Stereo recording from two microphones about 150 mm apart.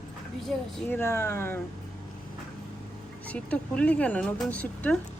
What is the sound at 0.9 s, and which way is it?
Speech, 15° left (ahead or behind).